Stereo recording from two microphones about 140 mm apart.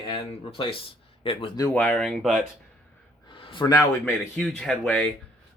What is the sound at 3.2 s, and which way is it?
Gasp, 40° left (ahead or behind).